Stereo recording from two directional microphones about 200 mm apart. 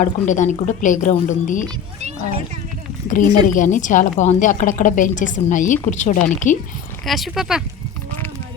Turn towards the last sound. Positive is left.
turn(degrees=0)  # may be behind; listen again after turning